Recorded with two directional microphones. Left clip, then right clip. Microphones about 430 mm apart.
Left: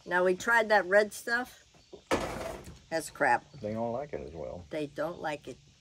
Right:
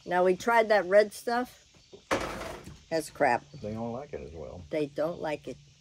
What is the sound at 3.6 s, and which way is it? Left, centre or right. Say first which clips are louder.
Speech: left 3 dB; left.